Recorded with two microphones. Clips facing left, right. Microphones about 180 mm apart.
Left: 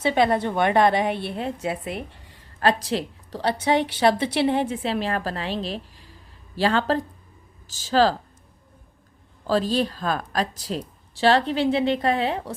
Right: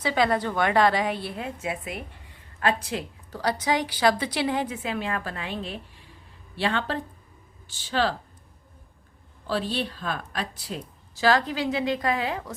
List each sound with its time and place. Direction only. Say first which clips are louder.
0.0 s a woman's voice: left 3 dB; 25° left (ahead or behind)
9.5 s a woman's voice: left 6 dB; 40° left (ahead or behind)